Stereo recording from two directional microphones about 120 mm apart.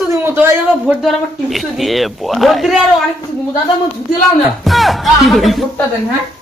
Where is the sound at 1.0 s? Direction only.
Centre (ahead or behind).